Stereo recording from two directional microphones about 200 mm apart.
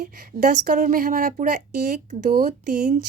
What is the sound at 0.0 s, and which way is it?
A woman's voice, 40° right (ahead or behind).